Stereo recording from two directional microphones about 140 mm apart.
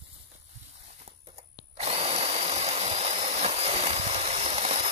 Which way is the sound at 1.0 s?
45° right (ahead or behind).